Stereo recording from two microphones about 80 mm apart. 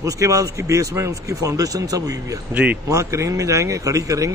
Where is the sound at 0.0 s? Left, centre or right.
Right.